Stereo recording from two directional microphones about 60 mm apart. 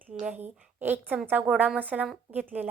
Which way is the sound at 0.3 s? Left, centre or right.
Right.